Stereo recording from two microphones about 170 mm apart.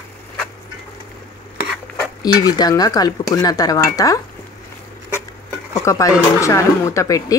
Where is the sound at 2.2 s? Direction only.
25° left (ahead or behind).